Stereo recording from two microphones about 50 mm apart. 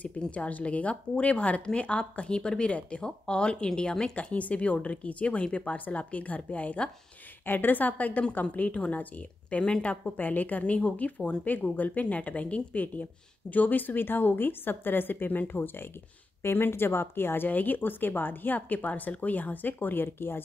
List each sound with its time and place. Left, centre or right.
0.2 s speech: left
10.1 s a woman's voice: left
17.5 s speech: left